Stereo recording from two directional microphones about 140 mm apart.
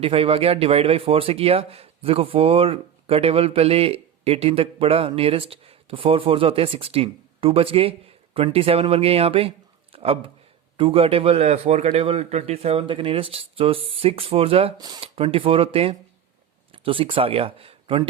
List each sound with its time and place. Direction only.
0.0 s a man's voice: 45° right (ahead or behind)
14.8 s speech: 30° right (ahead or behind)
15.0 s speech: 40° right (ahead or behind)